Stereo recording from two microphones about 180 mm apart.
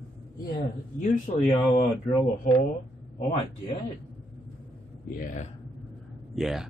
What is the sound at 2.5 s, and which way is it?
Speech, 45° left (ahead or behind).